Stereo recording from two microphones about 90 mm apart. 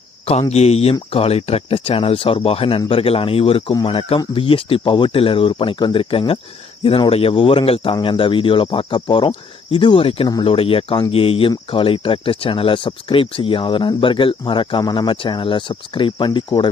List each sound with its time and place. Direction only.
0.3 s speech: 90° left
8.0 s speech: 75° left (ahead or behind)